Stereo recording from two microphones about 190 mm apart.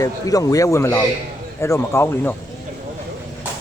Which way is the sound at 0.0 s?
20° left (ahead or behind).